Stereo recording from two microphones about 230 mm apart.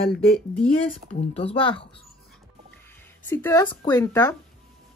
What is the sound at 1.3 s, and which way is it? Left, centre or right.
Speech, left.